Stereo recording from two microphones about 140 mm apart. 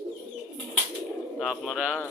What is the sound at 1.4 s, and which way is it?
Speech, centre (ahead or behind).